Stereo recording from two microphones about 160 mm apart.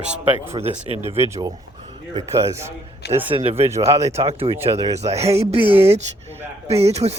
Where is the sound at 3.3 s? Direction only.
40° right (ahead or behind).